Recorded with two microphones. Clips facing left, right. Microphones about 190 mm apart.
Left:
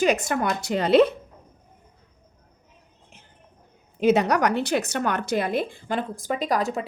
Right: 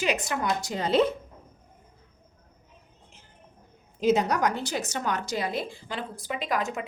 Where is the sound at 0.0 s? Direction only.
50° left (ahead or behind); by 1.0 s 70° left (ahead or behind).